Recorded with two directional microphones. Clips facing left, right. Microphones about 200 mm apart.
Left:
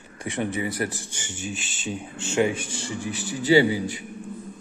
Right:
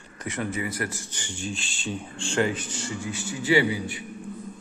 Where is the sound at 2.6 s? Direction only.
30° left (ahead or behind).